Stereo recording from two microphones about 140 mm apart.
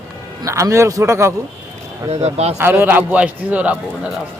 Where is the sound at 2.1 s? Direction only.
50° right (ahead or behind).